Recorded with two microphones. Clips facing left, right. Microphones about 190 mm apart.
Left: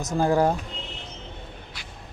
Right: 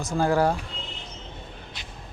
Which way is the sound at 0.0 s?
20° left (ahead or behind).